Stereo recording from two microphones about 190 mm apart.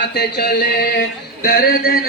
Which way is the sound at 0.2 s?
55° left (ahead or behind).